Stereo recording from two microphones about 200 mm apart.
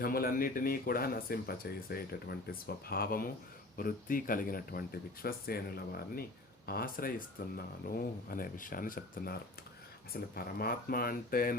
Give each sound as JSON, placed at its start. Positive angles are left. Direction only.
{"t": 0.0, "sound": "speech", "side_deg": 45}